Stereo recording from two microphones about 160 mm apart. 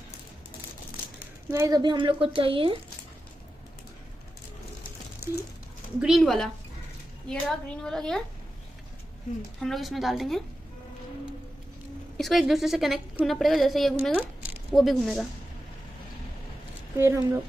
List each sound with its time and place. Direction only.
1.5 s speech: 20° right (ahead or behind)
5.9 s a woman's voice: 5° right (ahead or behind)
9.6 s a woman's voice: centre (ahead or behind)
12.2 s a woman's voice: centre (ahead or behind)
16.9 s speech: 15° right (ahead or behind)